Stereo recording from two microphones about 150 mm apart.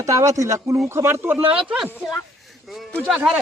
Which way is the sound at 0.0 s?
20° right (ahead or behind).